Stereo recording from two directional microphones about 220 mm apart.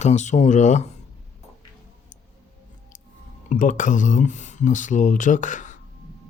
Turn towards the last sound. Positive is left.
turn(degrees=35)  # may be behind; listen again after turning